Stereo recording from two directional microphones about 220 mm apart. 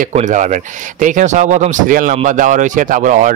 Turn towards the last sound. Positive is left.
turn(degrees=-35)  # may be behind; listen again after turning